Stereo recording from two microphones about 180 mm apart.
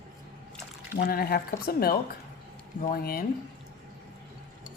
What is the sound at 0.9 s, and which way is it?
A woman's voice, 55° left (ahead or behind).